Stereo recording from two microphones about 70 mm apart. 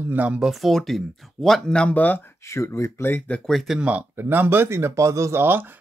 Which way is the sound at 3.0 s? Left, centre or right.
Left.